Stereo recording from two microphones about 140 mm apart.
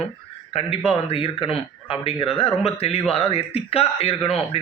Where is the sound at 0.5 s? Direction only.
45° left (ahead or behind).